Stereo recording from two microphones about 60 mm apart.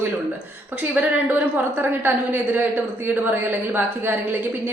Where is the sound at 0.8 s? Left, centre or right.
Right.